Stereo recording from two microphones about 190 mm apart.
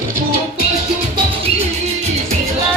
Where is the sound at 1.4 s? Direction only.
35° right (ahead or behind).